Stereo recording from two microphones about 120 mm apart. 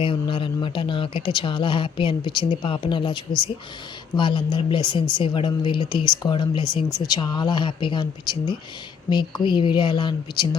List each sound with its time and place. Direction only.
0.0 s speech: 45° left (ahead or behind)